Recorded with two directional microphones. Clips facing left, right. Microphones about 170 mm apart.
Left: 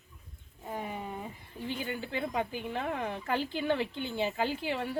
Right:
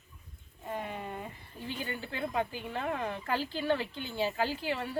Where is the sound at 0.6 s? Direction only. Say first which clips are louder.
Even; 5° left (ahead or behind).